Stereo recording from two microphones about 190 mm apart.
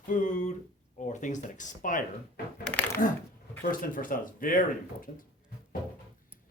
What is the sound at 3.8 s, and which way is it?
Speech, 45° left (ahead or behind).